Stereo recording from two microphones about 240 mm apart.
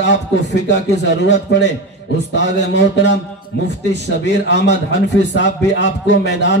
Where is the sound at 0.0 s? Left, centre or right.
Left.